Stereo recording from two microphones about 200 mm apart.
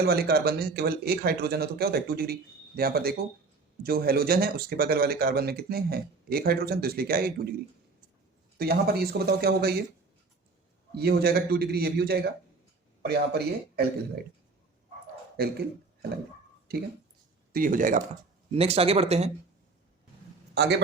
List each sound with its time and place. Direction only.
0.0 s speech: 50° right (ahead or behind)
8.5 s speech: 50° right (ahead or behind)
10.9 s speech: 50° right (ahead or behind)
15.4 s speech: 50° right (ahead or behind)
18.5 s speech: 30° right (ahead or behind)
20.6 s a man's voice: 60° right (ahead or behind)